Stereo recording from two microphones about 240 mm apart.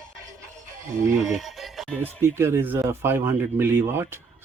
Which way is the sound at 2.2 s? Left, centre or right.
Centre.